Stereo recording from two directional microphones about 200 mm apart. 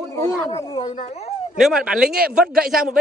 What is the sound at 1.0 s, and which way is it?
Speech, 30° left (ahead or behind).